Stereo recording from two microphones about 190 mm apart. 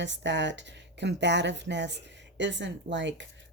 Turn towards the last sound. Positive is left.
turn(degrees=-70)  # may be behind; listen again after turning